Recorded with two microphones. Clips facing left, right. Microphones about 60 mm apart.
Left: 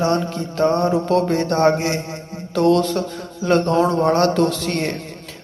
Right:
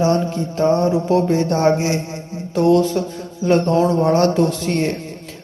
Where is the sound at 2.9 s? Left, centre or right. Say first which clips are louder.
Right 2 dB; left.